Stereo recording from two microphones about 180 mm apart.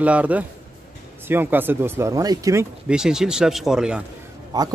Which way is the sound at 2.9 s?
5° right (ahead or behind).